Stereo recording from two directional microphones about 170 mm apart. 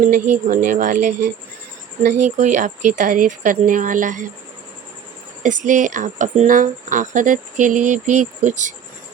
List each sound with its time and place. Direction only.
0.1 s speech: 50° right (ahead or behind)
5.4 s speech: 45° right (ahead or behind)